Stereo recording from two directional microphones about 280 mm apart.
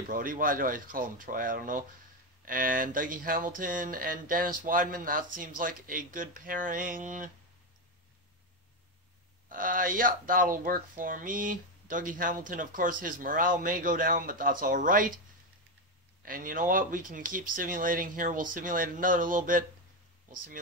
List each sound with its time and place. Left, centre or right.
0.1 s speech: right
9.5 s speech: right
16.2 s speech: right